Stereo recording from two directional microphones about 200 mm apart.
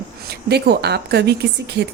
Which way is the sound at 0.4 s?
55° right (ahead or behind).